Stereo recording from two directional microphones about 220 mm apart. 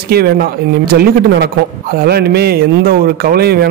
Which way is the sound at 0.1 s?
45° right (ahead or behind).